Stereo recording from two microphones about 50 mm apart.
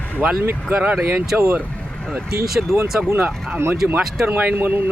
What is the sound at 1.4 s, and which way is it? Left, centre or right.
Speech, right.